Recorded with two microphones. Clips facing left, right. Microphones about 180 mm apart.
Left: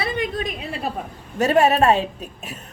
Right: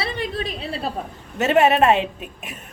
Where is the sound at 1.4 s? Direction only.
20° right (ahead or behind).